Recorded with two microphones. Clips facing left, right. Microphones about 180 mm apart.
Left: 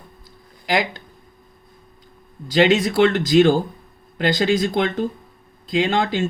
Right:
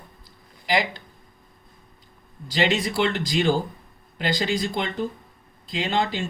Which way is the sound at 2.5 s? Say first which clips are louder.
Left 7 dB; 50° left (ahead or behind).